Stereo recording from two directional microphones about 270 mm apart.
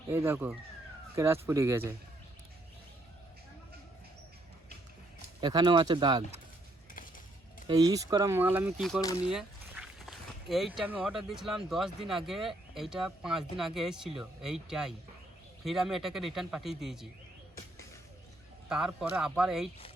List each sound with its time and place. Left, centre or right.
0.1 s speech: centre
5.4 s speech: centre
7.7 s speech: centre
18.7 s speech: centre